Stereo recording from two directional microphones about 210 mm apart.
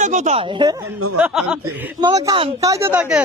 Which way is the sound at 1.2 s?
5° right (ahead or behind).